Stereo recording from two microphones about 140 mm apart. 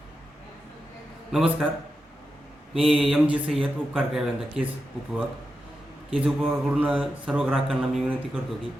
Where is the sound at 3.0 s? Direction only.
5° right (ahead or behind).